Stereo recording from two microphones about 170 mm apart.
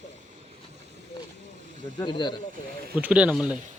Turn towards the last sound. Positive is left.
turn(degrees=-5)  # may be behind; listen again after turning